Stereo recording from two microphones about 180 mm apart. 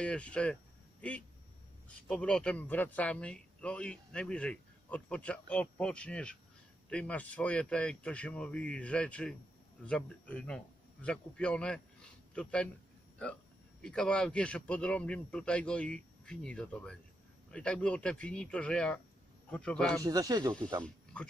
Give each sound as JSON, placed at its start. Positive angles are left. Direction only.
{"t": 0.0, "sound": "a man's voice", "side_deg": 5}
{"t": 2.0, "sound": "a man's voice", "side_deg": 5}
{"t": 13.8, "sound": "a man's voice", "side_deg": 5}
{"t": 20.0, "sound": "speech", "side_deg": -20}
{"t": 20.8, "sound": "speech", "side_deg": 5}